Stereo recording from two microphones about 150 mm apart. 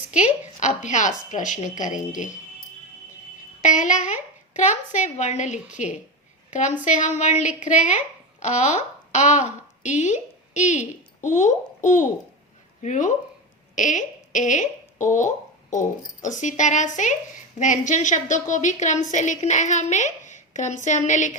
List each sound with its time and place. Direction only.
0.1 s a woman's voice: 55° left (ahead or behind)
3.6 s a woman's voice: 55° left (ahead or behind)